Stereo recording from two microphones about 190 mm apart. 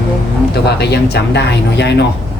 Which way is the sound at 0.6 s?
60° left (ahead or behind).